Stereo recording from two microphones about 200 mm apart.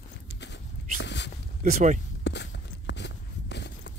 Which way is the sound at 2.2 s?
60° left (ahead or behind).